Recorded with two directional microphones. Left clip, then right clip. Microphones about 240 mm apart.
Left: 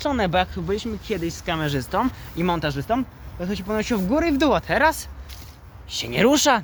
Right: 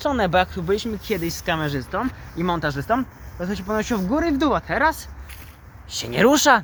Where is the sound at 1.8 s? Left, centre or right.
Left.